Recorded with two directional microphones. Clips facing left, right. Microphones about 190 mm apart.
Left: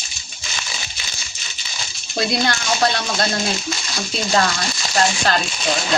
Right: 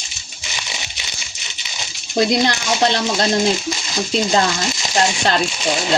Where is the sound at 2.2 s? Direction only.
20° right (ahead or behind).